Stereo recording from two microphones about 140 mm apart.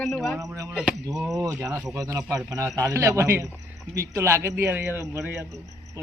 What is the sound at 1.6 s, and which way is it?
Speech, 20° right (ahead or behind).